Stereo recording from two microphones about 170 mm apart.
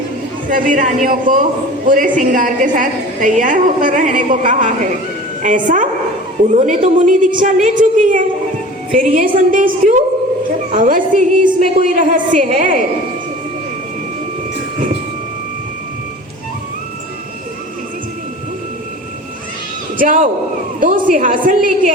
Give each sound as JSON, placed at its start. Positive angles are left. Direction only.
{"t": 0.5, "sound": "a woman's voice", "side_deg": -50}
{"t": 20.0, "sound": "a woman's voice", "side_deg": -50}